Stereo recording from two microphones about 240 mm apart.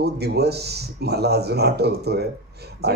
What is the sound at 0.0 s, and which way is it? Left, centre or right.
Speech, right.